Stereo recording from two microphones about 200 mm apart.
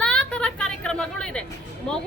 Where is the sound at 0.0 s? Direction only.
5° left (ahead or behind).